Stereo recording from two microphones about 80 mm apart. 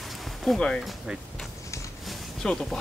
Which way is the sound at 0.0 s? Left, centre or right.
Centre.